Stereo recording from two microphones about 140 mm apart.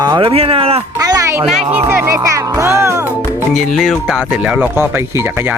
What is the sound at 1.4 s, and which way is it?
Speech, 5° right (ahead or behind).